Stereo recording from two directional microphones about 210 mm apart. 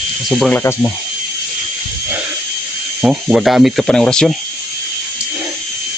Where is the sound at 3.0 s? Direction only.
Centre (ahead or behind).